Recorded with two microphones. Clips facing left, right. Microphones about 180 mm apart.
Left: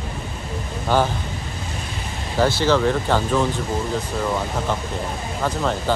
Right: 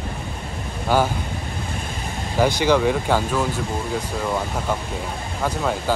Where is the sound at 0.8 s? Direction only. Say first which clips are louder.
Even; 10° right (ahead or behind).